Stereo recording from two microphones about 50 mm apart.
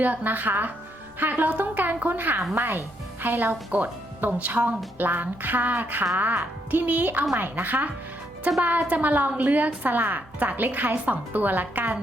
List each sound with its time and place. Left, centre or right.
0.0 s speech: right